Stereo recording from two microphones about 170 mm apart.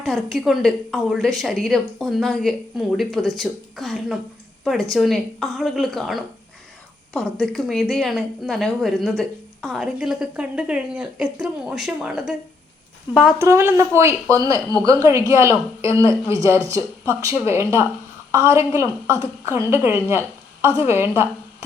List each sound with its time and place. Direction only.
0.0 s a woman's voice: centre (ahead or behind)
13.4 s a woman's voice: 15° right (ahead or behind)